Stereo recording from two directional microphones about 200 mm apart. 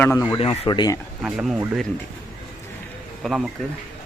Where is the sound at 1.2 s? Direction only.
5° right (ahead or behind).